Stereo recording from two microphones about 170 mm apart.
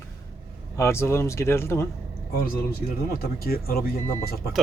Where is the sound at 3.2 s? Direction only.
65° left (ahead or behind).